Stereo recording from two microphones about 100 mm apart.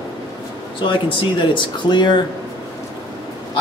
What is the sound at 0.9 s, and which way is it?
Speech, 55° left (ahead or behind).